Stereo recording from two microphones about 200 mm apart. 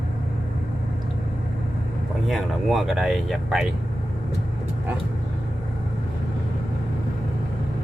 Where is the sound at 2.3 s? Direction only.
Centre (ahead or behind).